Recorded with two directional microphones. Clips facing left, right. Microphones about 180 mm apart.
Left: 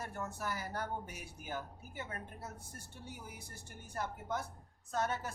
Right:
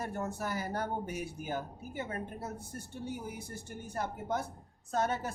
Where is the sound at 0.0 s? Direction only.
25° right (ahead or behind).